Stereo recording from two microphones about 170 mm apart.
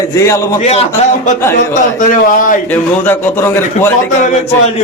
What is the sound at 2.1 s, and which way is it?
Speech, 50° left (ahead or behind).